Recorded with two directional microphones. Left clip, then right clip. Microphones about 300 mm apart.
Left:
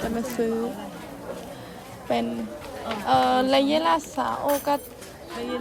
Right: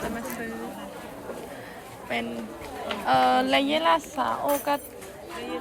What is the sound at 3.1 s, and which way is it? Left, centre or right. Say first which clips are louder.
Speech: left 1 dB; centre.